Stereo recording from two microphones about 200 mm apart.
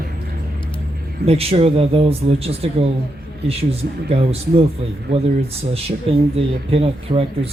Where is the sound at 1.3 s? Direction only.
30° right (ahead or behind).